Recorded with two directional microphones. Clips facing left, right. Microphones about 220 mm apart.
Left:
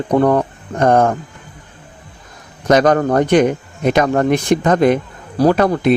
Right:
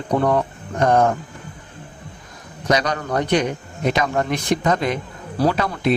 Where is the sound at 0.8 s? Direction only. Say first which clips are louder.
Left 4 dB; 50° left (ahead or behind).